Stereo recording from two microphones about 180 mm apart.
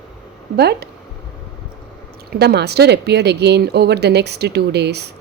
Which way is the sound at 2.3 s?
65° right (ahead or behind).